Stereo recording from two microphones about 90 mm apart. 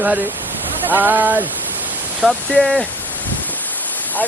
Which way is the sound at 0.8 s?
20° right (ahead or behind).